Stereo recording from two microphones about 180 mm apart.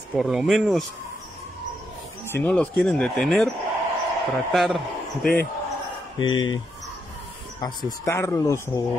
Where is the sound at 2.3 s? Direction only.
10° left (ahead or behind).